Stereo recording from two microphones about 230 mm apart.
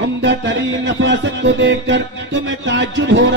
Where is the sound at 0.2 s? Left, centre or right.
Right.